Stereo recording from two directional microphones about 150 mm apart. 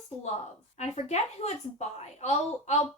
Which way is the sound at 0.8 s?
50° left (ahead or behind).